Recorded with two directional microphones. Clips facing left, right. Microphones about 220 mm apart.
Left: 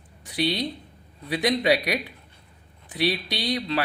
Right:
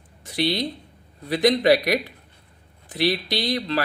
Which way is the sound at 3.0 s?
45° right (ahead or behind).